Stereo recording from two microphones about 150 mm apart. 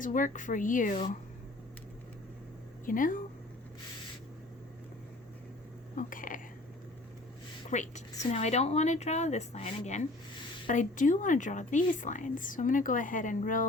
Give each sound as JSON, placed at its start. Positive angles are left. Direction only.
{"t": 0.0, "sound": "a woman's voice", "side_deg": 60}
{"t": 2.8, "sound": "a woman's voice", "side_deg": 65}
{"t": 6.0, "sound": "speech", "side_deg": 65}
{"t": 7.7, "sound": "a woman's voice", "side_deg": 50}